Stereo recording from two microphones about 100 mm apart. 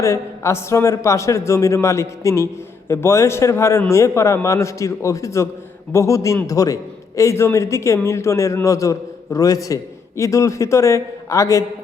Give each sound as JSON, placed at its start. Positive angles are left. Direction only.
{"t": 0.0, "sound": "a man's voice", "side_deg": 30}